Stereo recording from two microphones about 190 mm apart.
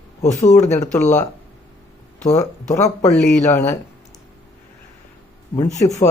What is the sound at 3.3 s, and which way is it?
Speech, 40° left (ahead or behind).